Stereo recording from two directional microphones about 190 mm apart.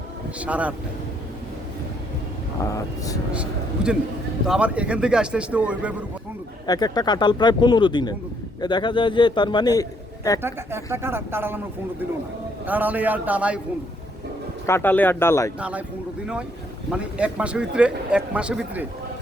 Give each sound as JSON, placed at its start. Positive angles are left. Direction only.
{"t": 0.3, "sound": "speech", "side_deg": -5}
{"t": 2.6, "sound": "speech", "side_deg": 15}
{"t": 3.8, "sound": "speech", "side_deg": -5}
{"t": 6.7, "sound": "speech", "side_deg": 20}
{"t": 10.4, "sound": "speech", "side_deg": -15}
{"t": 14.7, "sound": "speech", "side_deg": 10}
{"t": 16.9, "sound": "speech", "side_deg": -5}